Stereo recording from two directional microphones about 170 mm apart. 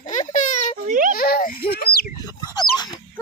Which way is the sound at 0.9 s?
50° right (ahead or behind).